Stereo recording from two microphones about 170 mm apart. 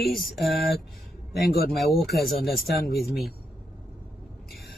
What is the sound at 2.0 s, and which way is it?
Speech, centre (ahead or behind).